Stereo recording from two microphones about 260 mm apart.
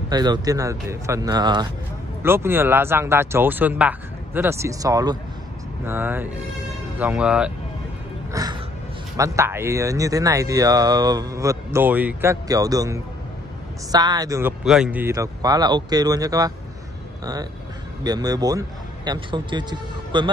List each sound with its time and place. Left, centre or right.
0.1 s speech: centre
8.3 s music: centre
9.1 s speech: centre